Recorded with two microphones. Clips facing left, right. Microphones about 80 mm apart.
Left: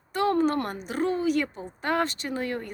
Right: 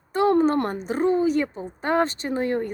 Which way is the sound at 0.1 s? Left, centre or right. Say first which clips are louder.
Right 5 dB; right.